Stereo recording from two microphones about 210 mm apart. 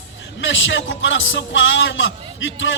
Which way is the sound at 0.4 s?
65° left (ahead or behind).